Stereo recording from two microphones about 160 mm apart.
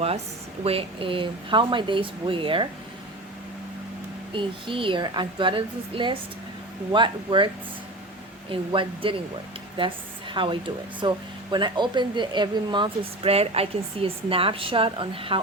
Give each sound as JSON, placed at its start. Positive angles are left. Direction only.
{"t": 0.6, "sound": "speech", "side_deg": -35}
{"t": 4.4, "sound": "a woman's voice", "side_deg": -30}